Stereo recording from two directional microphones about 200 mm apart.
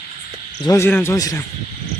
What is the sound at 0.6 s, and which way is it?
Speech, 15° left (ahead or behind).